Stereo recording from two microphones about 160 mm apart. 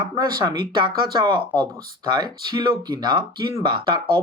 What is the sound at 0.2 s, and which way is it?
Speech, 30° right (ahead or behind).